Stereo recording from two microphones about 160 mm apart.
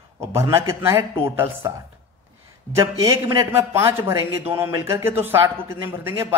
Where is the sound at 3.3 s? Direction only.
15° right (ahead or behind).